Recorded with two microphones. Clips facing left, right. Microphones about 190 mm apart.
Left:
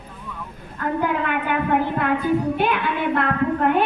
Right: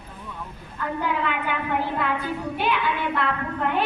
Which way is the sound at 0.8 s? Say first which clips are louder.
Left 4 dB; 50° left (ahead or behind).